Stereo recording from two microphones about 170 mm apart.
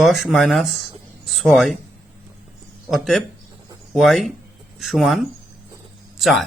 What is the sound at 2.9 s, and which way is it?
Speech, centre (ahead or behind).